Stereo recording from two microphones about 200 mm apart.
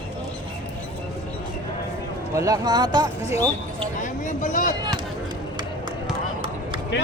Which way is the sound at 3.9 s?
40° left (ahead or behind).